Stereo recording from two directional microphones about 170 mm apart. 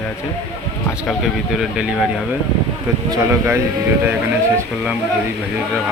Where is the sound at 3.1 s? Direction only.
15° right (ahead or behind).